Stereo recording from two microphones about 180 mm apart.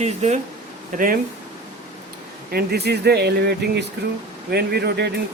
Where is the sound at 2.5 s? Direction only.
65° right (ahead or behind).